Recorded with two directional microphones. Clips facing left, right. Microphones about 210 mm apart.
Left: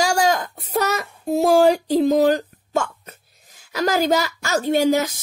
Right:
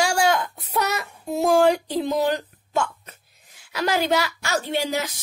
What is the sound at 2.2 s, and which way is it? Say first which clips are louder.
Hiccup: left 6 dB; 45° left (ahead or behind).